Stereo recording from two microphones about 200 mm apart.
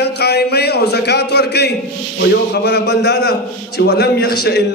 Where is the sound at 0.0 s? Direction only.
55° left (ahead or behind).